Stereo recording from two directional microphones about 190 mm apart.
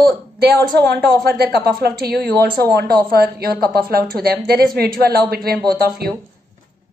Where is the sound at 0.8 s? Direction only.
55° right (ahead or behind).